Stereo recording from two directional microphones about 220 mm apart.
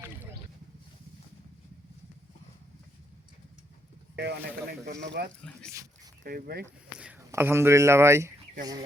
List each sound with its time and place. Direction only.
4.1 s speech: 50° right (ahead or behind)
7.0 s speech: 10° right (ahead or behind)